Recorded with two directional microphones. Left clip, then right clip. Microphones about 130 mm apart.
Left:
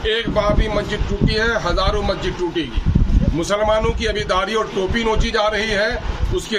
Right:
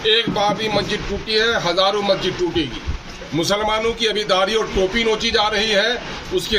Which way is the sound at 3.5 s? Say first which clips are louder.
Left 2 dB; 5° left (ahead or behind).